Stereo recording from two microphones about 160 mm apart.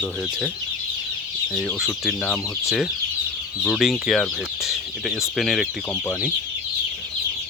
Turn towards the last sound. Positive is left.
turn(degrees=0)  # may be behind; listen again after turning